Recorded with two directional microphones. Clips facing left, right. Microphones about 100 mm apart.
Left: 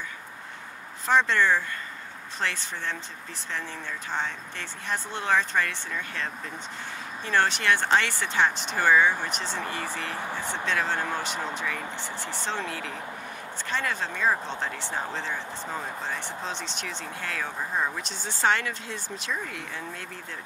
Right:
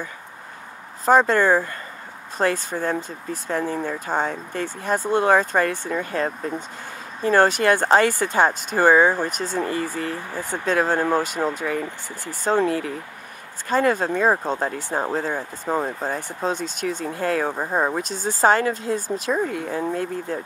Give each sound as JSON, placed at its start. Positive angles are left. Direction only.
{"t": 1.0, "sound": "speech", "side_deg": -40}